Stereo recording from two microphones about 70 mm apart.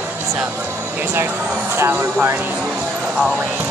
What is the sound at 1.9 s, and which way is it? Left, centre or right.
Speech, right.